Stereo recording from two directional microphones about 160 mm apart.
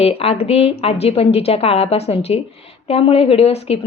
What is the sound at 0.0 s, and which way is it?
A woman's voice, 40° left (ahead or behind).